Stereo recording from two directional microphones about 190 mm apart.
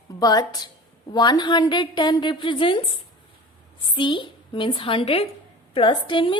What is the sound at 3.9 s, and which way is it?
A woman's voice, 25° left (ahead or behind).